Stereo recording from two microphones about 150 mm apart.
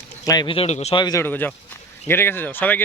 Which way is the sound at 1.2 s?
10° left (ahead or behind).